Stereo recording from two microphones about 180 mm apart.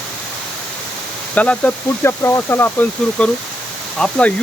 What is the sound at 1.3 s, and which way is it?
Speech, 10° left (ahead or behind).